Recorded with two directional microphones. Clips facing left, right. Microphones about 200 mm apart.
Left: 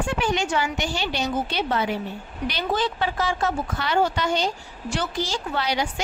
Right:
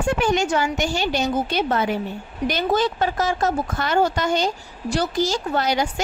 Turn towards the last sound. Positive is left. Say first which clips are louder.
# right 4 dB
turn(degrees=-45)  # may be behind; listen again after turning